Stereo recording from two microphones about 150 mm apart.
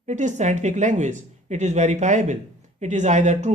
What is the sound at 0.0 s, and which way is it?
Speech, 55° right (ahead or behind).